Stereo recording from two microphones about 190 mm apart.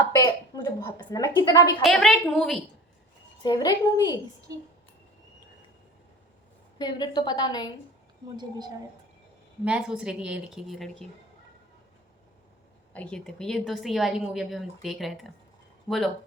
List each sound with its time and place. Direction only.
0.2 s a woman's voice: 20° left (ahead or behind)
1.8 s a woman's voice: centre (ahead or behind)
3.4 s a woman's voice: 20° left (ahead or behind)
6.7 s a woman's voice: 20° left (ahead or behind)
8.4 s a woman's voice: 20° right (ahead or behind)
9.6 s a woman's voice: 5° right (ahead or behind)
12.9 s a woman's voice: 5° left (ahead or behind)